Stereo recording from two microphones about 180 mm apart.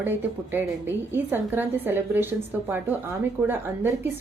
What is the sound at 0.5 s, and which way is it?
A woman's voice, 10° right (ahead or behind).